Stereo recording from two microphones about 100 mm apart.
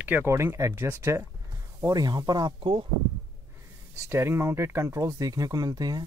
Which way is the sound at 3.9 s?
25° right (ahead or behind).